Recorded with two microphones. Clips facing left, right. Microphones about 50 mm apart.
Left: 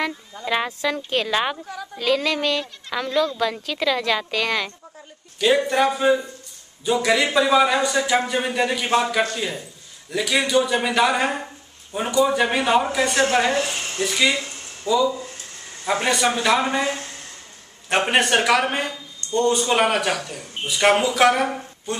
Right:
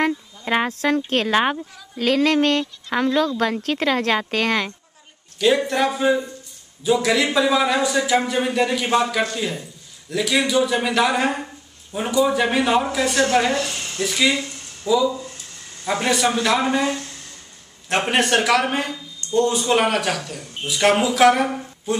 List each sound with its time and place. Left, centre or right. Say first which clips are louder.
0.8 s speech: right 3 dB; right
5.4 s speech: even; centre
13.6 s speech: left 1 dB; left
14.0 s speech: right 1 dB; centre